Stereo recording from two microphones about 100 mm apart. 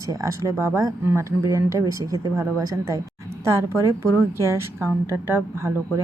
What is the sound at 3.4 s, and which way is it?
A woman's voice, 25° right (ahead or behind).